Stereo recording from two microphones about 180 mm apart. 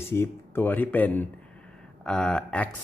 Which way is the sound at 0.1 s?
10° left (ahead or behind).